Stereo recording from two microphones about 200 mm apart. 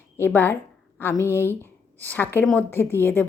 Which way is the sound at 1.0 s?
10° left (ahead or behind).